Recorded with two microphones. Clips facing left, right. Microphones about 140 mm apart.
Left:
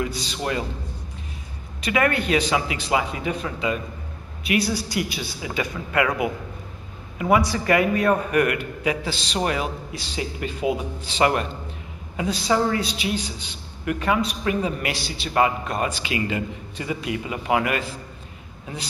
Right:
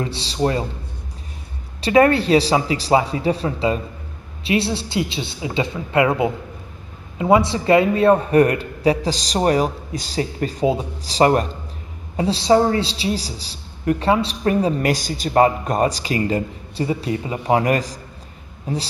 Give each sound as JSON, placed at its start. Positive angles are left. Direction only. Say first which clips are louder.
{"t": 0.0, "sound": "a woman's voice", "louder": "right 6 dB", "side_deg": -30}
{"t": 1.8, "sound": "a woman's voice", "louder": "right 8 dB", "side_deg": -30}